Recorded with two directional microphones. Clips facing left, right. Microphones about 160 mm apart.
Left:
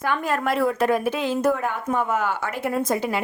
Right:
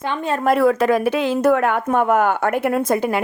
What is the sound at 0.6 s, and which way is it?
Speech, 90° right.